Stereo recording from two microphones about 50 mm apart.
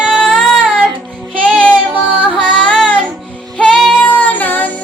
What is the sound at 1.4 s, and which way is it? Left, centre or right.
Child singing, centre.